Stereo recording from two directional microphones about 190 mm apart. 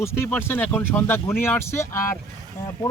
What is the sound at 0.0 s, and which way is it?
Speech, 15° left (ahead or behind).